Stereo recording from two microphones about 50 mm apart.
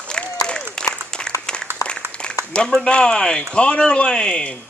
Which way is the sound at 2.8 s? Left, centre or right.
Centre.